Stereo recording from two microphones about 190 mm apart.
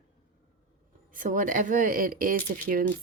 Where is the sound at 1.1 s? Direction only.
45° right (ahead or behind).